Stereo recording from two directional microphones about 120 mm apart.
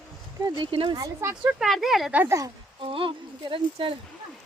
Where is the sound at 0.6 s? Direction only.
45° right (ahead or behind).